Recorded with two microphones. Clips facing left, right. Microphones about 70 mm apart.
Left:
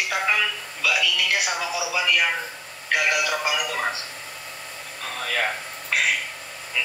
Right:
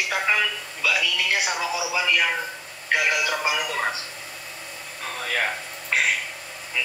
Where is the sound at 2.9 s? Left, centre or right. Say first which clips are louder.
Even; right.